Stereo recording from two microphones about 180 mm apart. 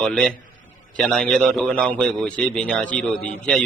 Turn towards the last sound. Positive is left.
turn(degrees=5)  # may be behind; listen again after turning